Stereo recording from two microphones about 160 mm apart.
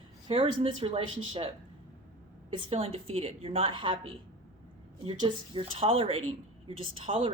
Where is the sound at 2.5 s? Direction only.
35° right (ahead or behind).